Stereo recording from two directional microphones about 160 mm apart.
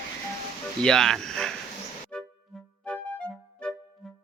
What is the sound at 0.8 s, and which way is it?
Speech, 5° left (ahead or behind).